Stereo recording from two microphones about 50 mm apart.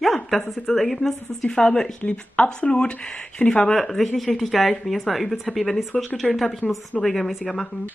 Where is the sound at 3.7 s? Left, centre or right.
Centre.